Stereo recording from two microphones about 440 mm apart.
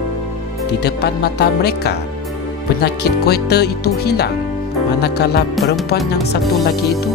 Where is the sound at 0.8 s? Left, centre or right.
Left.